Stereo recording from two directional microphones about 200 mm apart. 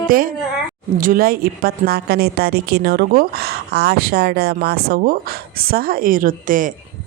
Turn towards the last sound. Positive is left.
turn(degrees=-40)  # may be behind; listen again after turning